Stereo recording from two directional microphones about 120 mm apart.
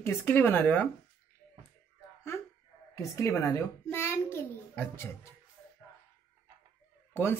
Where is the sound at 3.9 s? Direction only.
20° left (ahead or behind).